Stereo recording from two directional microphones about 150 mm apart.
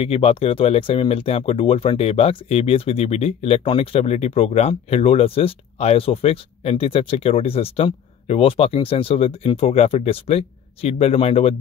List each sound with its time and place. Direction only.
0.0 s speech: 40° left (ahead or behind)